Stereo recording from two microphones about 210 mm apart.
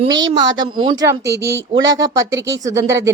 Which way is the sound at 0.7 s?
20° right (ahead or behind).